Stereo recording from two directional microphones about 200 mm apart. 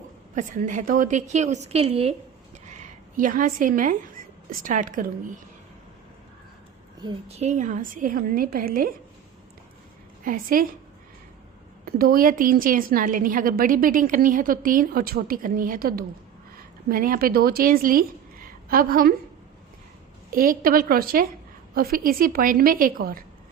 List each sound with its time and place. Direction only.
0.3 s a woman's voice: 40° right (ahead or behind)
2.6 s a sound: 35° right (ahead or behind)
4.6 s a woman's voice: 40° right (ahead or behind)
7.0 s a woman's voice: 25° right (ahead or behind); by 8.9 s 45° right (ahead or behind)
10.2 s a woman's voice: 45° right (ahead or behind)
11.9 s a woman's voice: 45° right (ahead or behind)
20.3 s a woman's voice: 45° right (ahead or behind)